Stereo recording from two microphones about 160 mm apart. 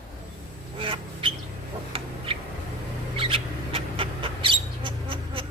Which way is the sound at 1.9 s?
35° right (ahead or behind).